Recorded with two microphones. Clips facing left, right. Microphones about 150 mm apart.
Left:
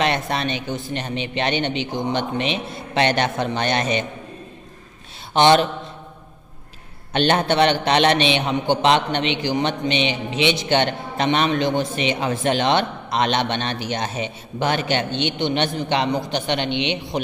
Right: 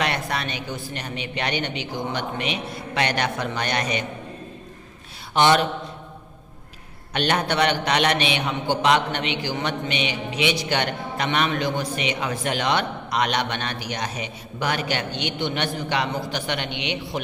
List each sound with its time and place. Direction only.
0.0 s a man's voice: 25° left (ahead or behind)
5.3 s a man's voice: 25° left (ahead or behind)
7.1 s a man's voice: 30° left (ahead or behind)